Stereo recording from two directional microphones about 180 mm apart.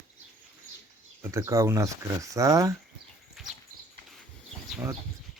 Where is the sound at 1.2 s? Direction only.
15° right (ahead or behind).